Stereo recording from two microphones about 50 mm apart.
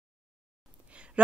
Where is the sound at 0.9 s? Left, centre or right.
Right.